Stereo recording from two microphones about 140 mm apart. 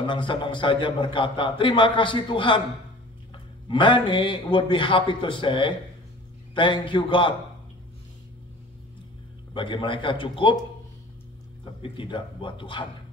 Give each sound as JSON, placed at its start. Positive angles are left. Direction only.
{"t": 0.0, "sound": "a man's voice", "side_deg": 35}
{"t": 3.6, "sound": "a man's voice", "side_deg": 35}
{"t": 9.5, "sound": "a man's voice", "side_deg": 35}
{"t": 11.8, "sound": "a man's voice", "side_deg": 35}